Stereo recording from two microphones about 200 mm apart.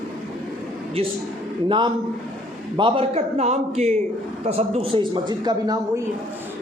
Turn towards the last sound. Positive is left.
turn(degrees=-20)  # may be behind; listen again after turning